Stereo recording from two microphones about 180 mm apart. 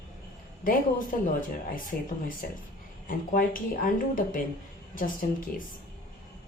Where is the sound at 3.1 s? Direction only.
50° left (ahead or behind).